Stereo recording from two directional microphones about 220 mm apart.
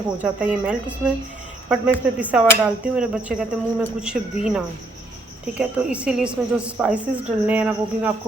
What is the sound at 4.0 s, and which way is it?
Cricket, 5° right (ahead or behind).